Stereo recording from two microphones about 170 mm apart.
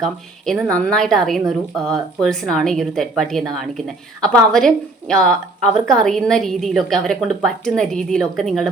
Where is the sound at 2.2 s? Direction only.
5° left (ahead or behind).